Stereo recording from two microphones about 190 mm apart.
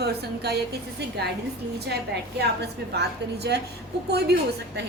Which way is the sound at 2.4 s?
60° right (ahead or behind).